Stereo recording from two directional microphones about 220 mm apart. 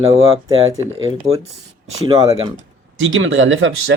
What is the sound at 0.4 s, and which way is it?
Speech, 15° right (ahead or behind).